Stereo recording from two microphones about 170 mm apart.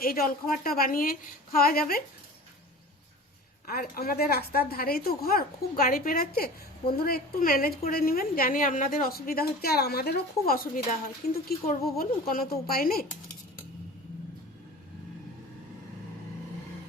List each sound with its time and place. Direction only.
0.0 s a woman's voice: 60° left (ahead or behind)
3.7 s a woman's voice: 60° left (ahead or behind)